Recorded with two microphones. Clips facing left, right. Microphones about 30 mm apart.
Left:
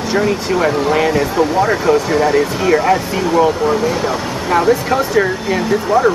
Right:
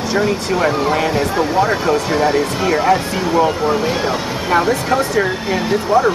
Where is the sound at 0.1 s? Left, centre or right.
Centre.